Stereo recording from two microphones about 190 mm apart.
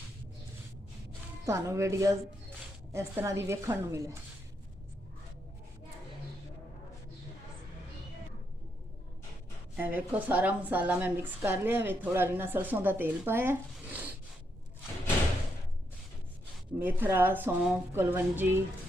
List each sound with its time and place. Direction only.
1.5 s a woman's voice: 15° right (ahead or behind)
9.7 s a woman's voice: 10° right (ahead or behind)
16.7 s a woman's voice: 10° right (ahead or behind)